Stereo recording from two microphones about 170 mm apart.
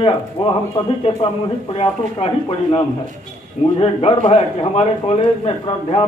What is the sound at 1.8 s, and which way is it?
A man's voice, 35° left (ahead or behind).